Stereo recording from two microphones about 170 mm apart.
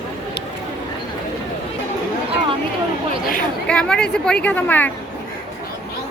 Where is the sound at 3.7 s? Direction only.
5° left (ahead or behind).